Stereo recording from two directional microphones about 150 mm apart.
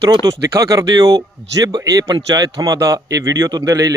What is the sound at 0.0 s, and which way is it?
A man's voice, 25° right (ahead or behind).